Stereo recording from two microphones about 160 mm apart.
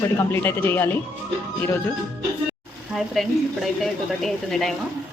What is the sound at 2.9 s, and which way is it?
Speech, centre (ahead or behind).